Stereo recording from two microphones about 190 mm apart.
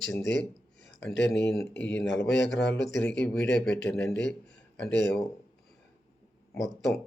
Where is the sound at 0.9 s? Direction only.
10° left (ahead or behind).